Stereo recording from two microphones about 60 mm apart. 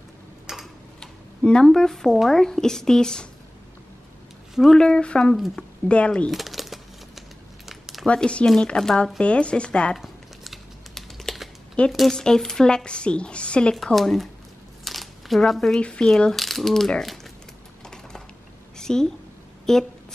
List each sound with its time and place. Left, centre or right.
0.5 s tick-tock: centre
1.4 s speech: centre
4.6 s speech: centre
6.3 s crumpling: centre
8.1 s speech: centre
9.9 s crumpling: centre
11.8 s speech: centre
13.9 s speech: centre
14.9 s a sound: centre
15.8 s speech: centre
17.8 s typing: centre
18.8 s a woman's voice: centre